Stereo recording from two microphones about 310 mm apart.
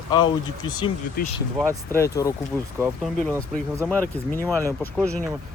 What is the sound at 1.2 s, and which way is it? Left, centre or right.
Speech, left.